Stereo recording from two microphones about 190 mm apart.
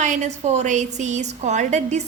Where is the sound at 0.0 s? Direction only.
40° right (ahead or behind).